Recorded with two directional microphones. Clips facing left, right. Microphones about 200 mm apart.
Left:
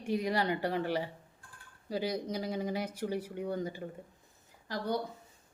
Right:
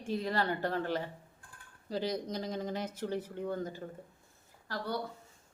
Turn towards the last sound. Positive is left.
turn(degrees=15)  # may be behind; listen again after turning